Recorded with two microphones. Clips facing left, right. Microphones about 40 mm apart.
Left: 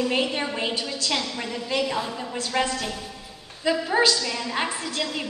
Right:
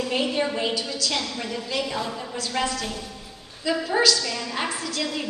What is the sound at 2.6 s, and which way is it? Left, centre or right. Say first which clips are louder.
Speech: right 1 dB; left.